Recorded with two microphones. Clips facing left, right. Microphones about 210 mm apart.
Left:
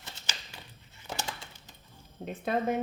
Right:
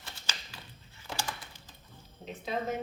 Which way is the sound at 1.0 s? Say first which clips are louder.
Left 1 dB; 25° left (ahead or behind).